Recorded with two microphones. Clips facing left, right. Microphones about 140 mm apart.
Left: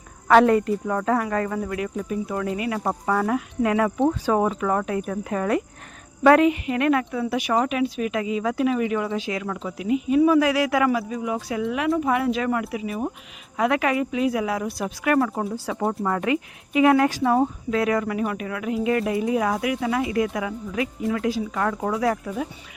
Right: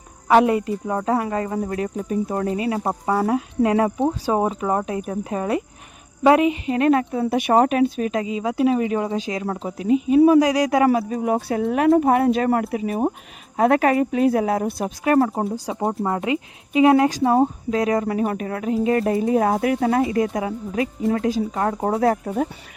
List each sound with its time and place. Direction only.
0.3 s speech: 15° right (ahead or behind); by 7.3 s 35° right (ahead or behind)
7.3 s a woman's voice: 50° right (ahead or behind)
15.0 s speech: 30° right (ahead or behind)
17.1 s speech: 35° right (ahead or behind)
21.5 s speech: 30° right (ahead or behind)